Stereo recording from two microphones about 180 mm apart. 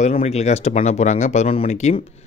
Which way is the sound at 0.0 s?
35° left (ahead or behind).